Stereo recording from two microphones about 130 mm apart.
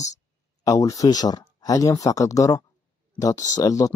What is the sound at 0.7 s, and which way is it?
Speech, 25° left (ahead or behind).